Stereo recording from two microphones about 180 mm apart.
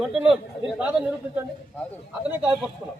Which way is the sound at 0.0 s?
5° right (ahead or behind).